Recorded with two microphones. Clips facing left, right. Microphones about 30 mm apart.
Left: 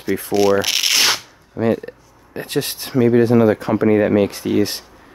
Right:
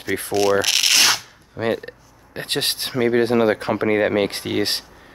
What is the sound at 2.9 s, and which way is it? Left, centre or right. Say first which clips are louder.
Speech: left 5 dB; right.